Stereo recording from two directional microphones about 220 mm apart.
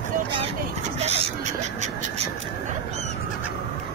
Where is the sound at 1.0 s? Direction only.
30° right (ahead or behind).